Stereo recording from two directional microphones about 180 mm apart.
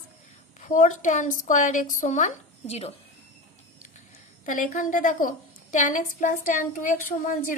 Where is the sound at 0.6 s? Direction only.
45° left (ahead or behind).